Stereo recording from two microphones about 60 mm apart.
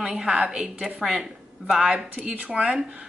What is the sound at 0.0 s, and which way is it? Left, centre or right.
Speech, centre.